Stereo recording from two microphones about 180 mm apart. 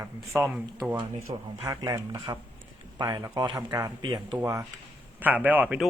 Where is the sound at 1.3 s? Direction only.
25° right (ahead or behind).